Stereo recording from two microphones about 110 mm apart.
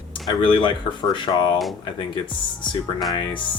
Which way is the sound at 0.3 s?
45° left (ahead or behind).